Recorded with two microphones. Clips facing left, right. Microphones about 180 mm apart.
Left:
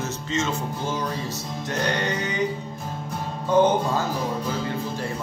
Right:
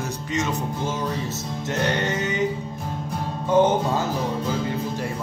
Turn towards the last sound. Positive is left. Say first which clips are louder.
# even
turn(degrees=-20)  # may be behind; listen again after turning